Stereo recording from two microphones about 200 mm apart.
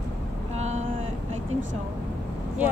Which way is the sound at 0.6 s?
35° right (ahead or behind).